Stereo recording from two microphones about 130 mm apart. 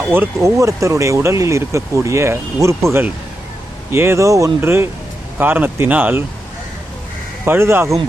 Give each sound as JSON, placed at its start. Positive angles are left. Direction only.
{"t": 0.1, "sound": "speech", "side_deg": -20}
{"t": 7.4, "sound": "speech", "side_deg": -20}